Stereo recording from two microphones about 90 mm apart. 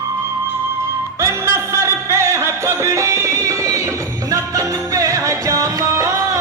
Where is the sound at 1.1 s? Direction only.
30° right (ahead or behind).